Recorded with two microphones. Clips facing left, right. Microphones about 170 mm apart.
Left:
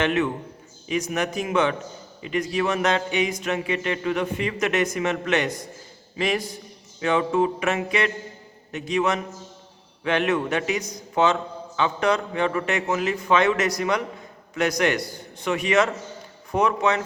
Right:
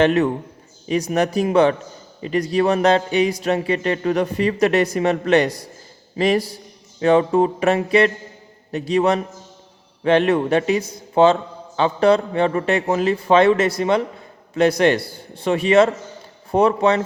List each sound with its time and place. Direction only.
0.0 s speech: 40° right (ahead or behind)